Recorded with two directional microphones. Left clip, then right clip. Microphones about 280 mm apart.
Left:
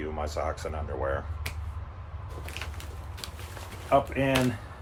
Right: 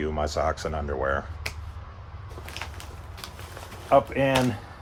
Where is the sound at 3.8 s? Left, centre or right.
Right.